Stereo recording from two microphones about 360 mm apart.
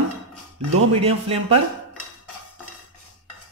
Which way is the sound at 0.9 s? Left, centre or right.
Centre.